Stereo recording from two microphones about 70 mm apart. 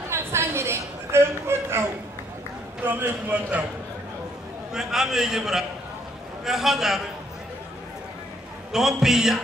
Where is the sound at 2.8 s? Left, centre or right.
Right.